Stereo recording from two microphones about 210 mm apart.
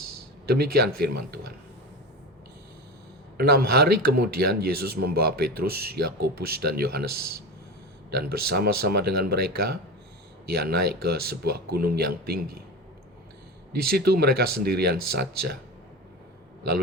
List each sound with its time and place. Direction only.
0.4 s speech: 50° right (ahead or behind)
3.3 s speech: 50° right (ahead or behind)
8.1 s speech: 50° right (ahead or behind)
13.8 s speech: 50° right (ahead or behind)